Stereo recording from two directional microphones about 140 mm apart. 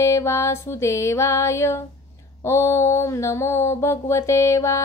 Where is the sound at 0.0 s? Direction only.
20° left (ahead or behind).